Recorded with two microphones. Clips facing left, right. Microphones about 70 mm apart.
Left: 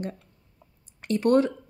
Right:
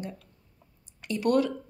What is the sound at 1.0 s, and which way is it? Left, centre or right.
Speech, left.